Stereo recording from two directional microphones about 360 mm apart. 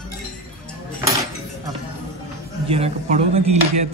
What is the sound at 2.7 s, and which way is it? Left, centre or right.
Speech, centre.